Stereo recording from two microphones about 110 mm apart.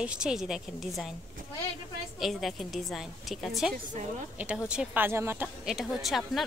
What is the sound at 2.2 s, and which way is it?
A woman's voice, centre (ahead or behind).